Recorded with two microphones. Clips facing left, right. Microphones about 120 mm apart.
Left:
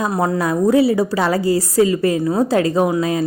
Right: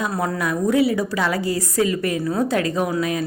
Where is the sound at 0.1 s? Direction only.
20° left (ahead or behind).